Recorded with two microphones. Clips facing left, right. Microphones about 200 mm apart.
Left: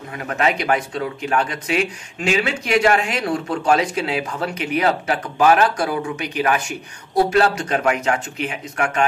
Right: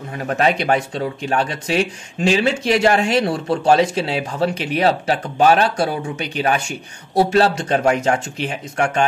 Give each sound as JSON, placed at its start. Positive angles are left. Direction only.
{"t": 0.1, "sound": "speech", "side_deg": -35}